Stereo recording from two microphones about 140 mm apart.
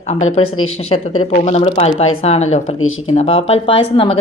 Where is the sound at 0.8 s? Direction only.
55° left (ahead or behind).